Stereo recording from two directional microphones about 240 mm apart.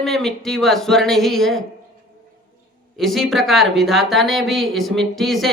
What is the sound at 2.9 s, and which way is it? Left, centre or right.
Speech, centre.